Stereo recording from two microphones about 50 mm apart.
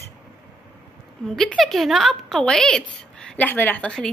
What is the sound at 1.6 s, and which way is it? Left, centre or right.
Speech, centre.